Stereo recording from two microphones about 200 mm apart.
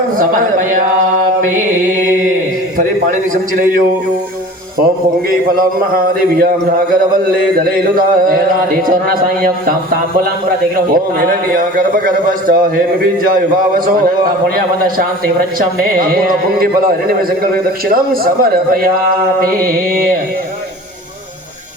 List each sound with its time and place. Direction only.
0.2 s mantra: 45° right (ahead or behind)
2.7 s a man's voice: 40° right (ahead or behind)
5.5 s a man's voice: 45° right (ahead or behind)
19.4 s a man's voice: 45° right (ahead or behind)